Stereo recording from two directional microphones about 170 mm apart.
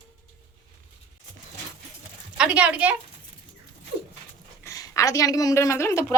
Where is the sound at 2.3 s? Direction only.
5° right (ahead or behind).